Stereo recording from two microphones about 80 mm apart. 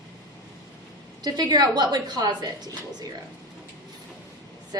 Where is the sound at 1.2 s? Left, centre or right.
Right.